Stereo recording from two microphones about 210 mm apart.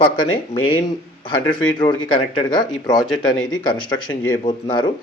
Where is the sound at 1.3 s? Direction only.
20° left (ahead or behind).